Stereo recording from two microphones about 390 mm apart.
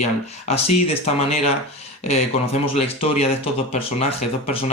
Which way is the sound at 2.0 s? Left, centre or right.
Centre.